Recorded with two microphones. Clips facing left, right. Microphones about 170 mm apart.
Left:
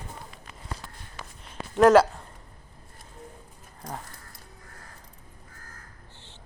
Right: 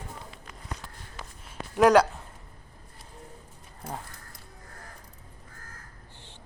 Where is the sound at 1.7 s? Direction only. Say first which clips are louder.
Left 2 dB; centre (ahead or behind).